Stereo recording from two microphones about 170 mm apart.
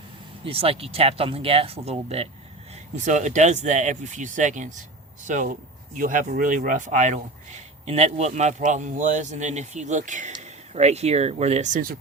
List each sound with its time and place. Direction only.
0.4 s speech: 35° right (ahead or behind); by 11.9 s 50° right (ahead or behind)